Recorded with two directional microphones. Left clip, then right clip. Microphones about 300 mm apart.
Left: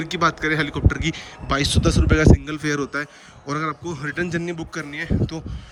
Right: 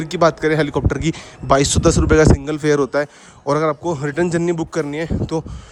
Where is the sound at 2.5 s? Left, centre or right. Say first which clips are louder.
Right 8 dB; centre.